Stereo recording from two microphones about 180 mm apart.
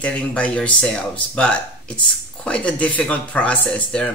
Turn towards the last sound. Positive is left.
turn(degrees=5)  # may be behind; listen again after turning